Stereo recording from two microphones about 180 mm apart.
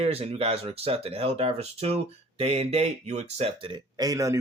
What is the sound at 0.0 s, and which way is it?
Speech, 35° right (ahead or behind).